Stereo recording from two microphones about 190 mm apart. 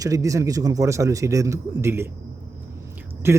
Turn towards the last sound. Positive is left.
turn(degrees=-15)  # may be behind; listen again after turning